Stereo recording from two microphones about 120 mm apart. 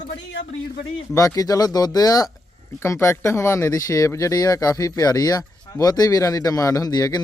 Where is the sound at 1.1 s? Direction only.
25° left (ahead or behind).